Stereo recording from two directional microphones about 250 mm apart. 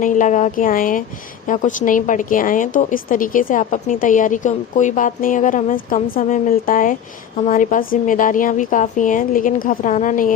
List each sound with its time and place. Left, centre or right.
0.0 s a woman's voice: left